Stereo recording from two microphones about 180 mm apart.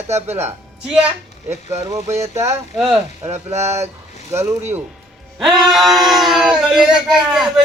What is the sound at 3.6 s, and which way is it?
Speech, 15° right (ahead or behind).